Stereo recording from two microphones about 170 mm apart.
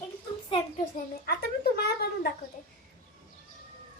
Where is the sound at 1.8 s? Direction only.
65° left (ahead or behind).